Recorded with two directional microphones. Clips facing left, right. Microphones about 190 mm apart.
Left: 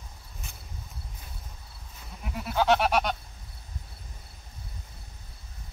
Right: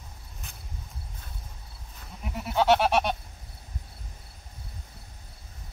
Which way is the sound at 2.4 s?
25° right (ahead or behind).